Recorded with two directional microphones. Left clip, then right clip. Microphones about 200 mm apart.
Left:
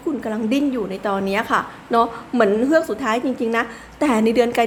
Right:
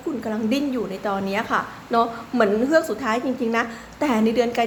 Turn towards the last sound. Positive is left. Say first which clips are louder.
# left 3 dB
turn(degrees=15)  # may be behind; listen again after turning